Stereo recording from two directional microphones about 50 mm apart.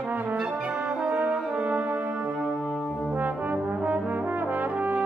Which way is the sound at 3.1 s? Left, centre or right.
Right.